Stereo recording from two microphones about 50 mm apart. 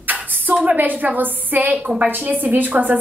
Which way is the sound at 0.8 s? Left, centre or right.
Right.